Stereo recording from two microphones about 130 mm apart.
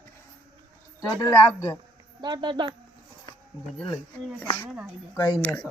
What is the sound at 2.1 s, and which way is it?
Speech, 35° right (ahead or behind).